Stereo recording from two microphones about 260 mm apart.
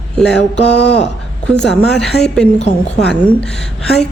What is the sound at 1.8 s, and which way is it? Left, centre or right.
Speech, centre.